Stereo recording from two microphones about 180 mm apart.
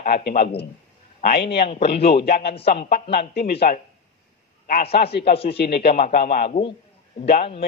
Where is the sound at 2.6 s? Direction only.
35° left (ahead or behind).